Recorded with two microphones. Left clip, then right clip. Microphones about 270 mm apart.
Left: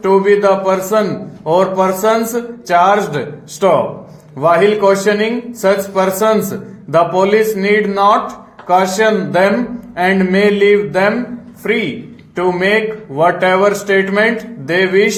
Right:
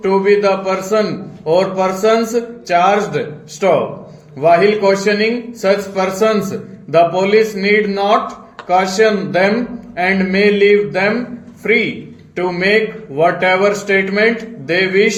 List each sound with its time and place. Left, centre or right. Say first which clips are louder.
0.1 s a man's voice: left 2 dB; left